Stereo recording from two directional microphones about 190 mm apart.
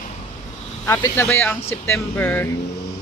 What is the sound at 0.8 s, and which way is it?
A man's voice, 15° left (ahead or behind).